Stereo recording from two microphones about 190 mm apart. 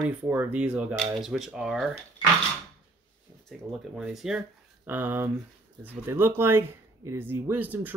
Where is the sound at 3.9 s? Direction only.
Centre (ahead or behind).